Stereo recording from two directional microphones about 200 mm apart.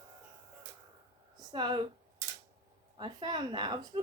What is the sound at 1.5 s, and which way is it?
Speech, 20° right (ahead or behind).